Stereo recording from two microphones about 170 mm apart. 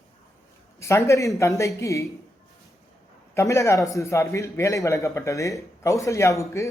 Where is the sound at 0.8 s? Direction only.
15° left (ahead or behind).